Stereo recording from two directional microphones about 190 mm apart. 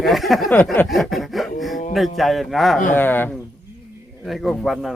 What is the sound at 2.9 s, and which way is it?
Speech, 10° left (ahead or behind).